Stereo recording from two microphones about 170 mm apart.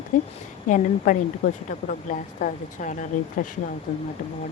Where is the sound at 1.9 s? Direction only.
50° left (ahead or behind).